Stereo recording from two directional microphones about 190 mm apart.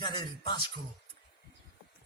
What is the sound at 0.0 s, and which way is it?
Music, 25° left (ahead or behind).